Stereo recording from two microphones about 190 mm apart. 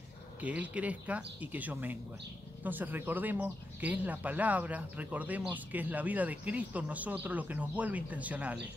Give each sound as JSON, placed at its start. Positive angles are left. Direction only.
{"t": 0.4, "sound": "speech", "side_deg": -5}